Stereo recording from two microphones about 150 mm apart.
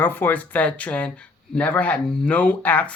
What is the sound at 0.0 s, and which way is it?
Speech, 15° left (ahead or behind).